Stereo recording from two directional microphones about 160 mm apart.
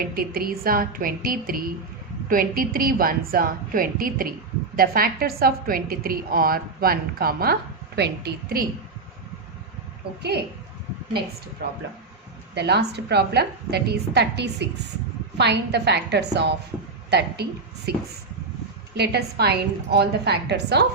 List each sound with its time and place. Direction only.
0.0 s a woman's voice: 70° right (ahead or behind)
12.5 s a woman's voice: 90° right
18.9 s a woman's voice: 90° right